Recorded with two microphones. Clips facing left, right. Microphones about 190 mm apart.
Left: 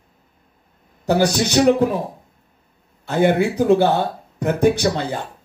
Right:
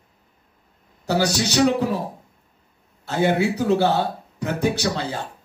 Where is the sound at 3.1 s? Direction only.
55° left (ahead or behind).